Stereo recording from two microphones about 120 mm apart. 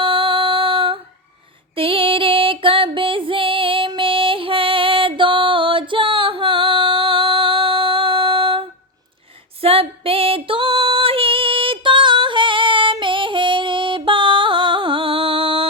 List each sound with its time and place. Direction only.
0.0 s music: 45° right (ahead or behind)
9.6 s female singing: 55° right (ahead or behind)